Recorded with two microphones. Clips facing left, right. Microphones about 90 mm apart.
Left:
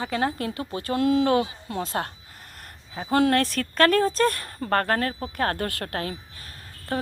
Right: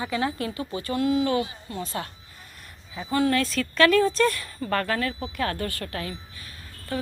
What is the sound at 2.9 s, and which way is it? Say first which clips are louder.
Speech: left 2 dB; 55° left (ahead or behind).